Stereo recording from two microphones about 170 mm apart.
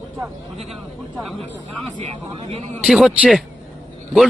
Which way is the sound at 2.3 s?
30° right (ahead or behind).